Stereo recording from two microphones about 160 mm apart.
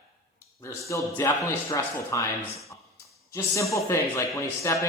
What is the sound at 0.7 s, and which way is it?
A man's voice, 20° left (ahead or behind).